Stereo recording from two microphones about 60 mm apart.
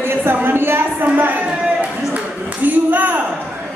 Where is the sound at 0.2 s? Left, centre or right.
Right.